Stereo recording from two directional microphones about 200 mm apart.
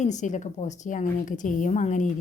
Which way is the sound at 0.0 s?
35° left (ahead or behind).